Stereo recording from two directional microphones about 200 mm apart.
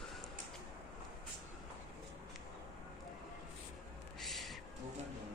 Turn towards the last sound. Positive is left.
turn(degrees=0)  # may be behind; listen again after turning